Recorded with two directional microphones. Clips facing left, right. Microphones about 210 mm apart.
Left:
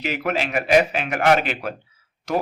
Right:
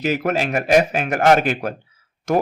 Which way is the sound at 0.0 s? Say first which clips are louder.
Right 4 dB; 45° right (ahead or behind).